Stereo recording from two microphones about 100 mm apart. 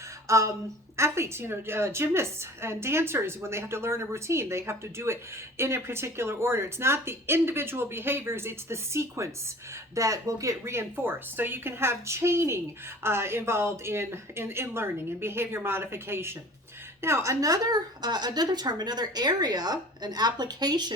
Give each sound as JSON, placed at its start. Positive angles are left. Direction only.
{"t": 0.3, "sound": "a woman's voice", "side_deg": -30}